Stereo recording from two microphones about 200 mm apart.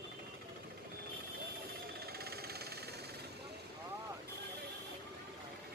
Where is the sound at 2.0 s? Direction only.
50° right (ahead or behind).